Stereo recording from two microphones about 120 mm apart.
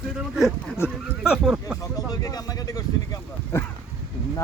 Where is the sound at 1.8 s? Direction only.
30° left (ahead or behind).